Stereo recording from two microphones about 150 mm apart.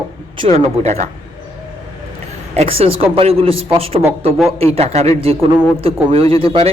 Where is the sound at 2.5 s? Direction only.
45° right (ahead or behind).